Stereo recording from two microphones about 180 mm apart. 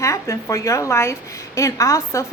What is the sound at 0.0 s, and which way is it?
A woman's voice, 15° left (ahead or behind).